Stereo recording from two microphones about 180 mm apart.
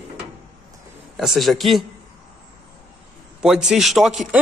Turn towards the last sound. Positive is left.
turn(degrees=0)  # may be behind; listen again after turning